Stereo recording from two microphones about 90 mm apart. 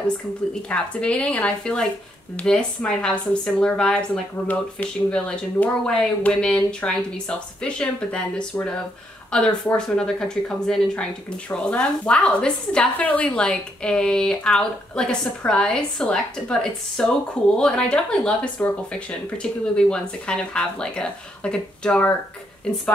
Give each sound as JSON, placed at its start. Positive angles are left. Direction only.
{"t": 0.6, "sound": "speech", "side_deg": 15}